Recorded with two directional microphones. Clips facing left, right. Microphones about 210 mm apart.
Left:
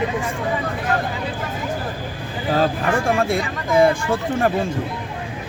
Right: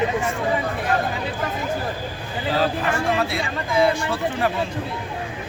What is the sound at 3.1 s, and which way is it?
Speech, 50° left (ahead or behind).